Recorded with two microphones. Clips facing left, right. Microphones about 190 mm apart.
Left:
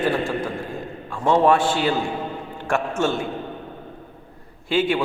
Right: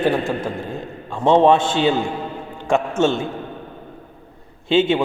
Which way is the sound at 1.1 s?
25° right (ahead or behind).